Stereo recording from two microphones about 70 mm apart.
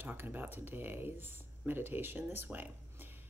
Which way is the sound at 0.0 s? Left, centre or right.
Right.